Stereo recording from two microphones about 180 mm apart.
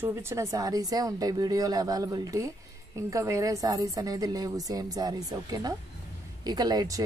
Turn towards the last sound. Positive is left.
turn(degrees=-20)  # may be behind; listen again after turning